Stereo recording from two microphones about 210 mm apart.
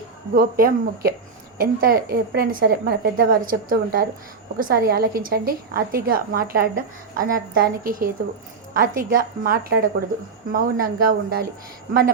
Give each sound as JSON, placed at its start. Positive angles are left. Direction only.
{"t": 0.3, "sound": "a woman's voice", "side_deg": -45}